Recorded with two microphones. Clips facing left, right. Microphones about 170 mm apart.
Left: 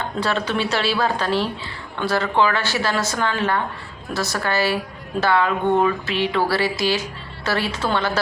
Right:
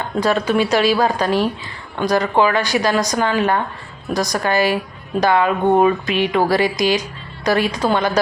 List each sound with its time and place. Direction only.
0.2 s a woman's voice: 10° right (ahead or behind)